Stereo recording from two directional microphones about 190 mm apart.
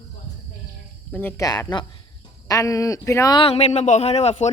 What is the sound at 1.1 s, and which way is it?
A man's voice, 10° left (ahead or behind).